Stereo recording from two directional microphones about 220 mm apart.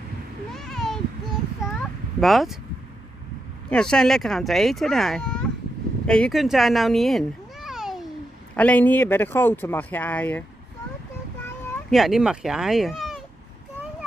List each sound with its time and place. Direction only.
0.6 s a sound: centre (ahead or behind)
3.7 s speech: 5° left (ahead or behind)
11.9 s speech: centre (ahead or behind)